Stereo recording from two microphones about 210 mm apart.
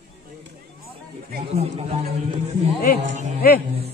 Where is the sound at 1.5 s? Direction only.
30° right (ahead or behind).